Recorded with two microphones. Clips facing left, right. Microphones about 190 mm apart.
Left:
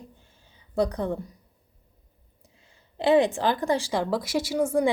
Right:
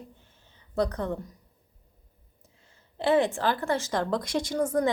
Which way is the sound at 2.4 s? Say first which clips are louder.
Left 2 dB; 15° left (ahead or behind).